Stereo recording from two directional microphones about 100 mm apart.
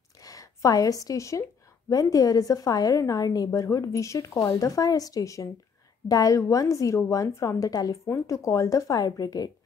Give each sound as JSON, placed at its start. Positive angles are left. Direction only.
{"t": 0.2, "sound": "a woman's voice", "side_deg": 35}